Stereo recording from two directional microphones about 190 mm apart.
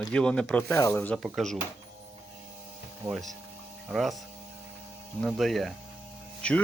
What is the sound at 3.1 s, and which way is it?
Speech, centre (ahead or behind).